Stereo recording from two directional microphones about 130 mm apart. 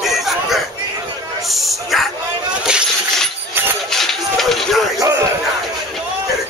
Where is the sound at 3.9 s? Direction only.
Centre (ahead or behind).